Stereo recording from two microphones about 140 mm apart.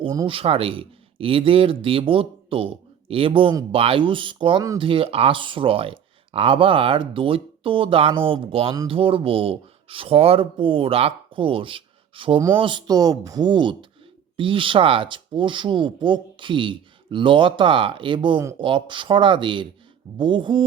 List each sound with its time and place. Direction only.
0.3 s speech: 40° right (ahead or behind)